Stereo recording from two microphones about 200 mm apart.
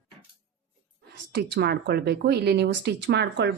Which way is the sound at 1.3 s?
55° right (ahead or behind).